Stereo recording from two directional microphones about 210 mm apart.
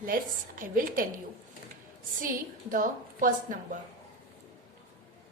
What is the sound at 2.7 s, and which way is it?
A woman's voice, 40° right (ahead or behind).